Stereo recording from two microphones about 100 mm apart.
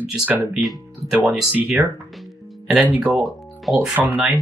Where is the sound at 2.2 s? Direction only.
Centre (ahead or behind).